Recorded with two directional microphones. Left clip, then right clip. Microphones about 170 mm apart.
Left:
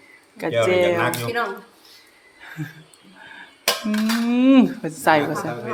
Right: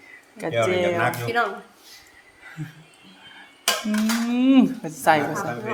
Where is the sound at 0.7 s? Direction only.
35° left (ahead or behind).